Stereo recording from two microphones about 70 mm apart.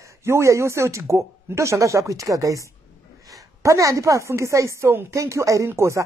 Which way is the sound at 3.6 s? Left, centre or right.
Right.